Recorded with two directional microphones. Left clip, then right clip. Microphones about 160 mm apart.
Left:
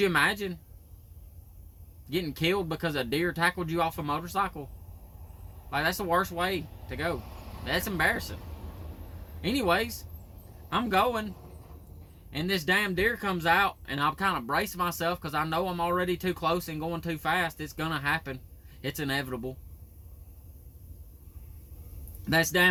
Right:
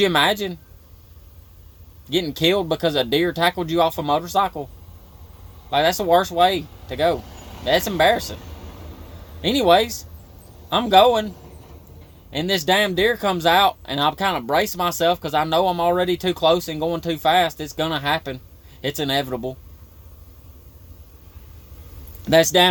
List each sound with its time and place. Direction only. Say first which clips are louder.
0.1 s speech: right 8 dB; 5° right (ahead or behind)
2.0 s speech: right 9 dB; 10° right (ahead or behind)
5.7 s speech: right 10 dB; 5° right (ahead or behind)
9.5 s speech: right 11 dB; 5° right (ahead or behind)
12.6 s speech: right 8 dB; 5° right (ahead or behind)
22.2 s a man's voice: right 10 dB; 5° right (ahead or behind)